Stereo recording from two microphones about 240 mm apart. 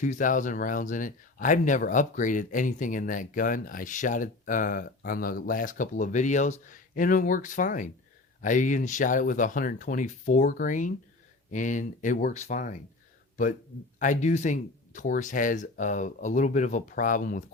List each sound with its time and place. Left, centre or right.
0.0 s speech: left